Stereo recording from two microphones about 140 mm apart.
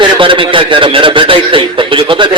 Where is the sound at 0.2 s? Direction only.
35° right (ahead or behind).